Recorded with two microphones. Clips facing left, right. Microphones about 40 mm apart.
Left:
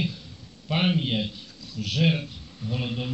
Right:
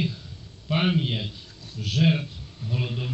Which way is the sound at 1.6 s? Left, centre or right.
Right.